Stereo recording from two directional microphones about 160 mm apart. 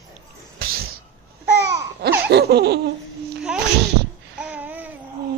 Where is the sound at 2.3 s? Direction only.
90° right.